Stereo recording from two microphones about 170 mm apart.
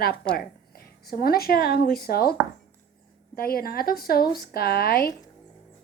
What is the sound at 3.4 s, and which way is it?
Speech, 60° left (ahead or behind).